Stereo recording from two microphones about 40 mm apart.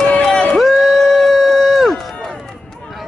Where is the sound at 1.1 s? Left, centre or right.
Centre.